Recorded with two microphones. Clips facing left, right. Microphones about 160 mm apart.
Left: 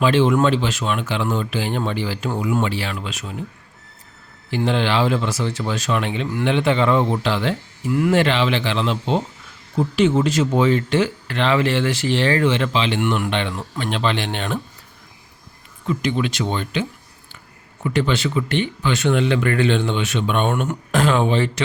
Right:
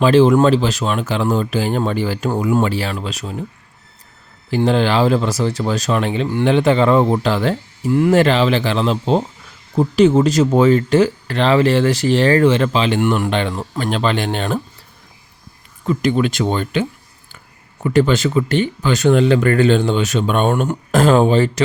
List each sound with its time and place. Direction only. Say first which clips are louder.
0.0 s speech: right 5 dB; 40° right (ahead or behind)
4.5 s speech: right 4 dB; 40° right (ahead or behind)
15.9 s speech: right 5 dB; 45° right (ahead or behind)
17.8 s speech: right 6 dB; 45° right (ahead or behind)